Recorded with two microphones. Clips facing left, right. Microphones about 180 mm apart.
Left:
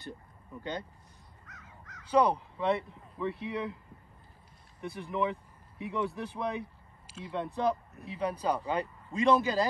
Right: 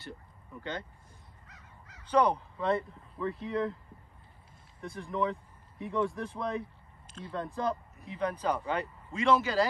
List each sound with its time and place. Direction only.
2.0 s speech: 10° left (ahead or behind)
4.8 s speech: centre (ahead or behind)